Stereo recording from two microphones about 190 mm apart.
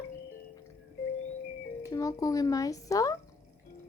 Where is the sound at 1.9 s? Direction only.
15° left (ahead or behind).